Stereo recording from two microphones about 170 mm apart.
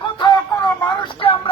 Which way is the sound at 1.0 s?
30° left (ahead or behind).